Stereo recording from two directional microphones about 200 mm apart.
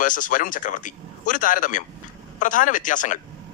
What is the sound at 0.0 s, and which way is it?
A man's voice, 40° left (ahead or behind).